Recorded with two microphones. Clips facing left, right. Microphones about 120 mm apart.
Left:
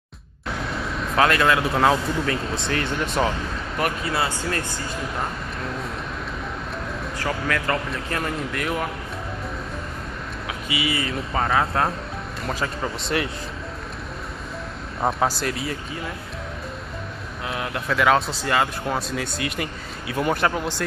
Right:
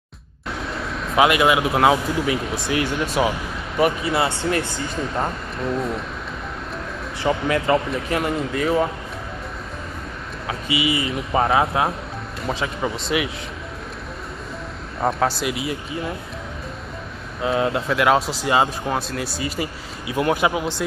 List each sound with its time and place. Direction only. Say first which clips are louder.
0.5 s vehicle: even; centre (ahead or behind)
1.1 s speech: right 3 dB; 15° right (ahead or behind)
2.4 s speech: right 1 dB; 25° left (ahead or behind)
2.7 s speech: right 3 dB; 10° right (ahead or behind)
4.0 s speech: right 4 dB; 25° right (ahead or behind)
7.2 s speech: right 6 dB; 20° right (ahead or behind)
10.7 s speech: right 3 dB; 20° right (ahead or behind)
12.4 s speech: right 2 dB; centre (ahead or behind)
13.1 s speech: right 1 dB; 10° right (ahead or behind)
15.0 s speech: right 2 dB; centre (ahead or behind)
17.5 s speech: right 9 dB; 25° right (ahead or behind)
17.8 s speech: left 2 dB; 5° right (ahead or behind)
18.4 s speech: right 3 dB; 20° right (ahead or behind)
18.9 s speech: right 1 dB; centre (ahead or behind)